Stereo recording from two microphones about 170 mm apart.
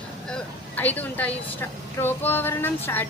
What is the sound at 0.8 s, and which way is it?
Speech, 10° left (ahead or behind).